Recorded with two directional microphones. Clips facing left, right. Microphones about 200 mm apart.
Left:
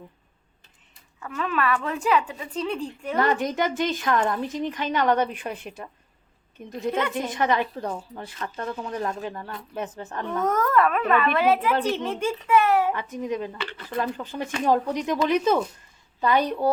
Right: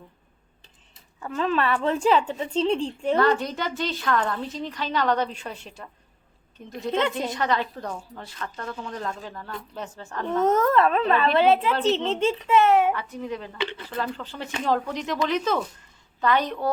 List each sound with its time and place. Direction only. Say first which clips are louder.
1.2 s a woman's voice: right 2 dB; 30° right (ahead or behind)
3.2 s a woman's voice: left 2 dB; 15° left (ahead or behind)
10.2 s a woman's voice: right 4 dB; 25° right (ahead or behind)
12.9 s a woman's voice: left 1 dB; 20° left (ahead or behind)
13.6 s speech: right 5 dB; 20° right (ahead or behind)
13.9 s a woman's voice: left 3 dB; 15° left (ahead or behind)